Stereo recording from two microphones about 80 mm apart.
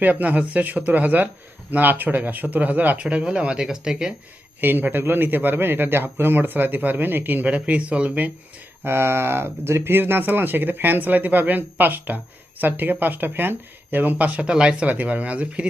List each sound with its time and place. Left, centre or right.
0.0 s speech: right
4.6 s speech: right
8.8 s speech: right